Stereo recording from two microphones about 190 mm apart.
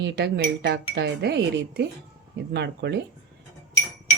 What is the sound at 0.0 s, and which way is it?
Speech, 65° right (ahead or behind).